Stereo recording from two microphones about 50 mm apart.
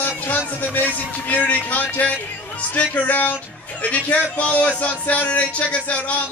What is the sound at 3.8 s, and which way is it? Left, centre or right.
Music, left.